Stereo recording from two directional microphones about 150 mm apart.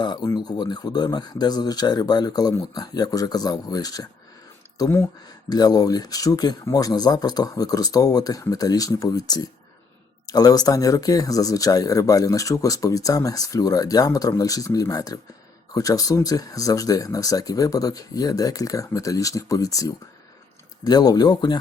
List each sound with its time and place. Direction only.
0.0 s speech: 25° left (ahead or behind)